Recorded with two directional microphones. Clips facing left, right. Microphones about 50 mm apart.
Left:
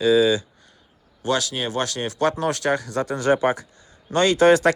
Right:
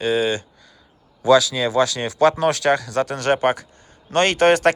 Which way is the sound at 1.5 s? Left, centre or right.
Right.